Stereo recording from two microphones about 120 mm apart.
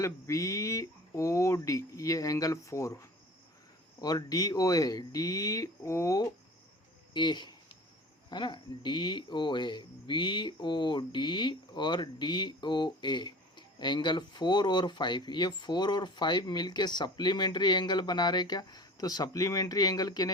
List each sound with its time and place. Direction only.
0.0 s speech: 25° left (ahead or behind)
7.1 s a sound: 40° left (ahead or behind)
8.3 s speech: 40° left (ahead or behind)